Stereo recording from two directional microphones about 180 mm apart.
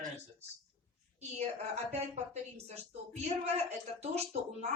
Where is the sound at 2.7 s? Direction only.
35° right (ahead or behind).